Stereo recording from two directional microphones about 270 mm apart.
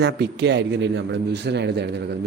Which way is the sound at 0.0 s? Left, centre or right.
Right.